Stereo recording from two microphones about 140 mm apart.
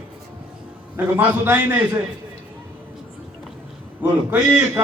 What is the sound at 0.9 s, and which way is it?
Speech, 15° right (ahead or behind).